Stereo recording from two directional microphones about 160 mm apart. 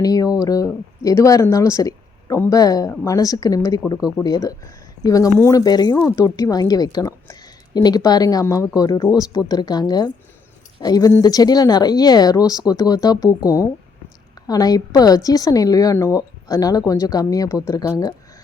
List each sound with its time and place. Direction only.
0.0 s a woman's voice: 20° left (ahead or behind)